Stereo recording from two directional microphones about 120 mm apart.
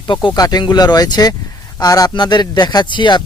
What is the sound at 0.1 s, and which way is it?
Speech, 40° left (ahead or behind).